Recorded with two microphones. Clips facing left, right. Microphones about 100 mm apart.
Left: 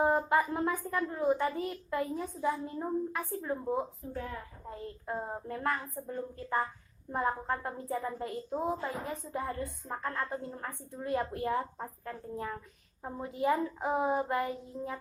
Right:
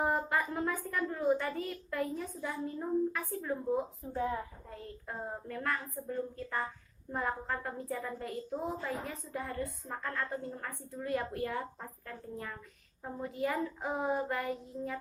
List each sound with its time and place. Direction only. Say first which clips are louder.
0.0 s a woman's voice: left 4 dB; 25° left (ahead or behind)
4.1 s a woman's voice: right 9 dB; 20° right (ahead or behind)
5.0 s a woman's voice: left 4 dB; 25° left (ahead or behind)